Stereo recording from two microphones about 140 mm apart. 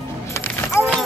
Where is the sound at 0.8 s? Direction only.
20° left (ahead or behind).